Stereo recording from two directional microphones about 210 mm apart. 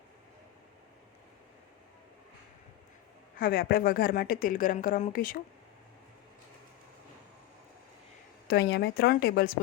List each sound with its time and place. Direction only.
3.3 s speech: 45° left (ahead or behind)
8.4 s a woman's voice: 50° left (ahead or behind)